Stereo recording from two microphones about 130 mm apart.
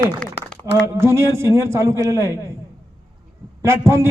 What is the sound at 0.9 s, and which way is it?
A man's voice, 20° right (ahead or behind).